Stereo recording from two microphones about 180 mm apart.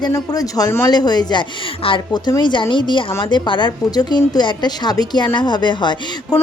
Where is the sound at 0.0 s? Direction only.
20° left (ahead or behind).